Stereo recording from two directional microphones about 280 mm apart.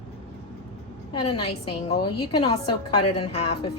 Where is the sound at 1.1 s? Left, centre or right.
Centre.